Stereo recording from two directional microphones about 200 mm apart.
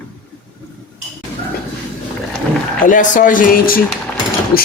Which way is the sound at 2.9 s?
40° left (ahead or behind).